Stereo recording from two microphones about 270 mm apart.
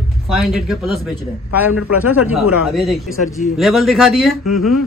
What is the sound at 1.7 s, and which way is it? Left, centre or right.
Speech, left.